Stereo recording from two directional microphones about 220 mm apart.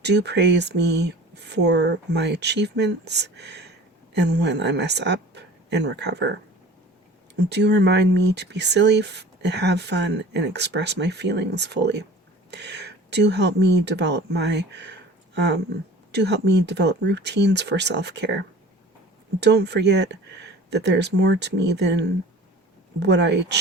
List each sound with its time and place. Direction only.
0.0 s speech: 50° right (ahead or behind)
7.3 s speech: 50° right (ahead or behind)